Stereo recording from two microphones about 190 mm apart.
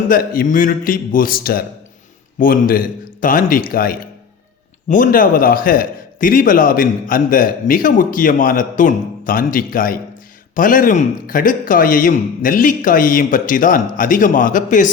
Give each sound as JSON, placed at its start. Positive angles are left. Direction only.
{"t": 0.1, "sound": "a man's voice", "side_deg": 50}